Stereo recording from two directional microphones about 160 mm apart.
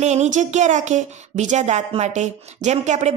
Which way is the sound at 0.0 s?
45° right (ahead or behind).